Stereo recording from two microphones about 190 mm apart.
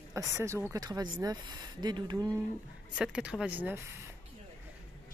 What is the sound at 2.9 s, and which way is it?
Speech, 5° right (ahead or behind).